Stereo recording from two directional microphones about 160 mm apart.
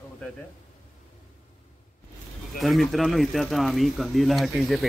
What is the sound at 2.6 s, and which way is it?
Speech, centre (ahead or behind).